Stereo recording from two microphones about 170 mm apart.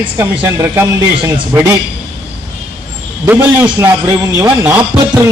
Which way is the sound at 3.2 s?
15° right (ahead or behind).